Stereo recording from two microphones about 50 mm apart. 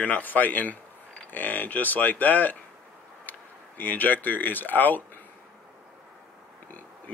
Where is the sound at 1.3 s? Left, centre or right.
Left.